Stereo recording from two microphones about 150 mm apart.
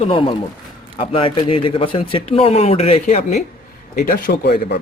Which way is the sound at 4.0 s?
75° left (ahead or behind).